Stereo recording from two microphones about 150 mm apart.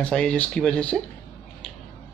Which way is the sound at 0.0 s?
5° left (ahead or behind).